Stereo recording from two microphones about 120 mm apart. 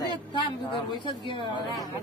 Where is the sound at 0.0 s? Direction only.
45° left (ahead or behind).